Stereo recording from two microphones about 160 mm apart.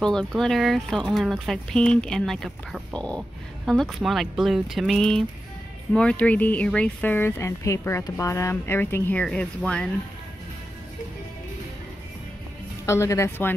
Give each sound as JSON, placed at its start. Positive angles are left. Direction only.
{"t": 0.0, "sound": "speech", "side_deg": 5}
{"t": 12.8, "sound": "speech", "side_deg": 20}